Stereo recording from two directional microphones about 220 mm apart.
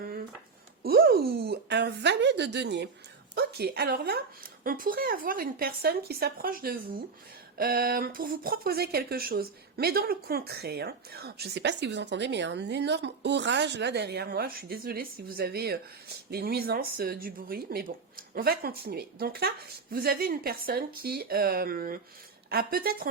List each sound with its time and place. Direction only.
0.8 s speech: 45° right (ahead or behind)